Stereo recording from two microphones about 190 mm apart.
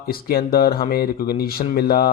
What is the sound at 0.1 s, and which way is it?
Speech, 55° left (ahead or behind).